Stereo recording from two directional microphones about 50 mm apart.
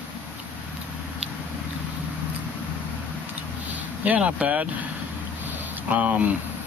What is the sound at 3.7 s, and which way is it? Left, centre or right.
Speech, right.